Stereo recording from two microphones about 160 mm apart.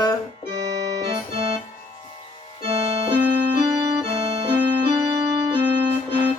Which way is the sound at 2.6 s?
40° right (ahead or behind).